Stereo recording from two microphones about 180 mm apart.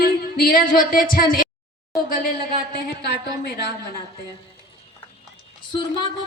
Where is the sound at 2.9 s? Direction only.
65° left (ahead or behind).